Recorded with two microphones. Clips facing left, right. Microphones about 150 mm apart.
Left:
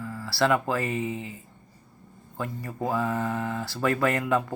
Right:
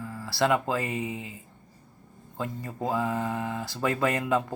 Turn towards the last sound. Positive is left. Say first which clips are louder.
# left 1 dB
turn(degrees=-20)  # may be behind; listen again after turning